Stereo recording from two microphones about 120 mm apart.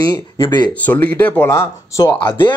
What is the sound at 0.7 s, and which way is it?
Speech, 15° left (ahead or behind).